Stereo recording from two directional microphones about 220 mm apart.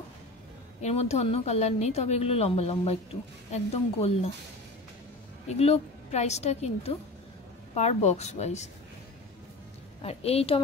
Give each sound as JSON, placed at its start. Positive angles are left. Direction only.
{"t": 0.8, "sound": "a woman's voice", "side_deg": 30}
{"t": 5.5, "sound": "a woman's voice", "side_deg": 30}
{"t": 10.0, "sound": "a woman's voice", "side_deg": 25}